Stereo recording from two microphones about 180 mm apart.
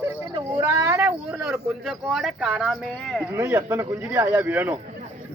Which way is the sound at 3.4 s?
10° right (ahead or behind).